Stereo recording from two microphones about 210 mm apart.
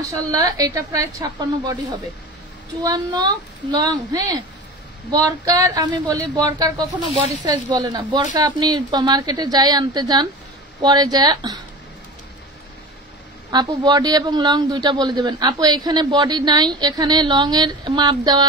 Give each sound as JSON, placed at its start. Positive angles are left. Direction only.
{"t": 0.0, "sound": "speech", "side_deg": -15}
{"t": 2.8, "sound": "a man's voice", "side_deg": -20}
{"t": 13.5, "sound": "a man's voice", "side_deg": -20}